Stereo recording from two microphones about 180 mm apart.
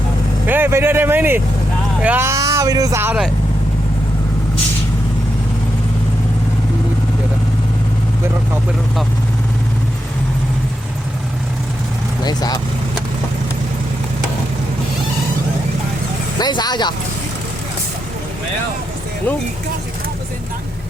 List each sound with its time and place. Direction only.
0.4 s speech: 10° right (ahead or behind)
12.2 s speech: 20° left (ahead or behind)
16.4 s speech: 25° left (ahead or behind)